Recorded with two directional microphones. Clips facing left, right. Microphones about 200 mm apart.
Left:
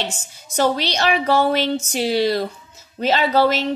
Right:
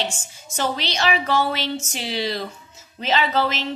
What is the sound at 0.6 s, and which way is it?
A woman's voice, 40° left (ahead or behind).